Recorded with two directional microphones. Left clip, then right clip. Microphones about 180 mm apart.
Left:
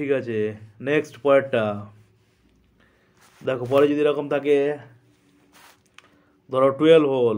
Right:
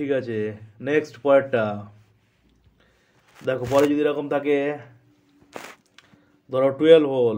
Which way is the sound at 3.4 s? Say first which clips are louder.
Left 1 dB; 15° left (ahead or behind).